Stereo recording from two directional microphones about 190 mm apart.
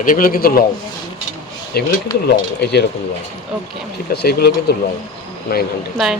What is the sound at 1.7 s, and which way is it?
Speech, 55° left (ahead or behind).